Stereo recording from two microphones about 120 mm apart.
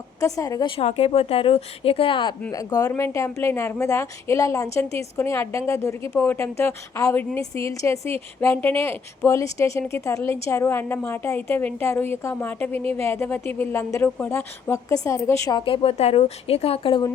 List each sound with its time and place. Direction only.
0.2 s speech: 30° left (ahead or behind)
0.8 s speech: 55° left (ahead or behind)
2.5 s speech: 30° left (ahead or behind)
15.5 s speech: 45° left (ahead or behind)